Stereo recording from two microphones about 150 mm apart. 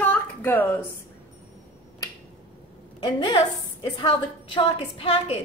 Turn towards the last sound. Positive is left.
turn(degrees=40)  # may be behind; listen again after turning